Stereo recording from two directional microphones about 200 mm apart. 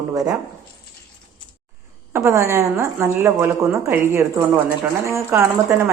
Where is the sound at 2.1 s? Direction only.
10° right (ahead or behind).